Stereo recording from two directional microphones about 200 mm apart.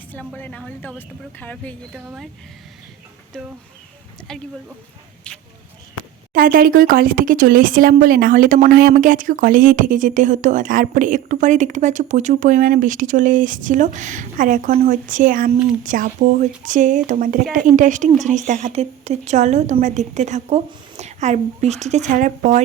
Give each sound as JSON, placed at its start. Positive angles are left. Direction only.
{"t": 0.1, "sound": "speech", "side_deg": 5}
{"t": 2.0, "sound": "speech", "side_deg": -5}
{"t": 4.3, "sound": "speech", "side_deg": 5}
{"t": 6.3, "sound": "speech", "side_deg": -45}